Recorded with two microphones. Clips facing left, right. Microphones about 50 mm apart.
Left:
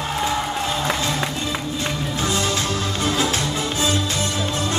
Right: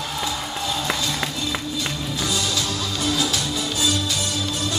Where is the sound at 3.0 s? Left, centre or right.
Left.